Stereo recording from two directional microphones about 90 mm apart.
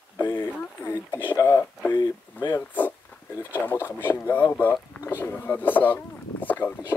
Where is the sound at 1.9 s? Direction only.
55° left (ahead or behind).